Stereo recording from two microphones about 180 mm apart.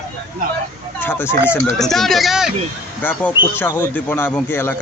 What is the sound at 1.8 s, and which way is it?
Speech, centre (ahead or behind).